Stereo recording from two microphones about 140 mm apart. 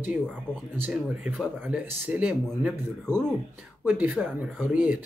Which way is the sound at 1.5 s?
10° right (ahead or behind).